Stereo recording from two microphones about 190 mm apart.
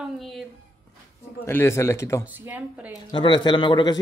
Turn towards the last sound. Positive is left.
turn(degrees=25)  # may be behind; listen again after turning